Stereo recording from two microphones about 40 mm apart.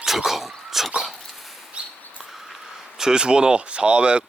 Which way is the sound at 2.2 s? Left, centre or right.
Centre.